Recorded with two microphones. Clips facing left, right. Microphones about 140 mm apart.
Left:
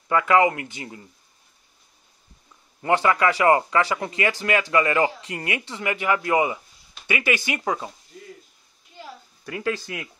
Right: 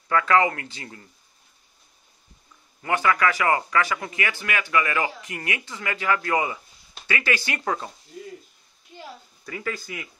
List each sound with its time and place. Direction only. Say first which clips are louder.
0.1 s speech: left 2 dB; 20° left (ahead or behind)
2.8 s a man's voice: left 2 dB; 30° left (ahead or behind); by 7.9 s 10° left (ahead or behind)
9.8 s speech: left 2 dB; 70° left (ahead or behind)